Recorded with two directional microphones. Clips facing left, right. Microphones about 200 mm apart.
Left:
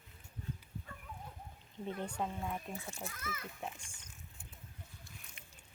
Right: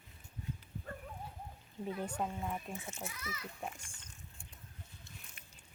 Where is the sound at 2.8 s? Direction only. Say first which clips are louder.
Even; 20° right (ahead or behind).